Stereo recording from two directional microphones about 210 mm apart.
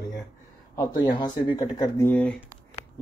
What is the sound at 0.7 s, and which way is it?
Speech, 20° left (ahead or behind).